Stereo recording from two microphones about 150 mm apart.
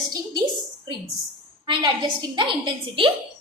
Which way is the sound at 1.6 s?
35° right (ahead or behind).